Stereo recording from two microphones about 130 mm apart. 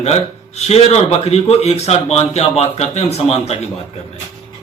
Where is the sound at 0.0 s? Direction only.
55° left (ahead or behind).